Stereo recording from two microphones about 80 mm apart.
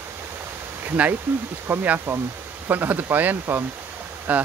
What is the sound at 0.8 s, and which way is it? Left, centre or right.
Speech, right.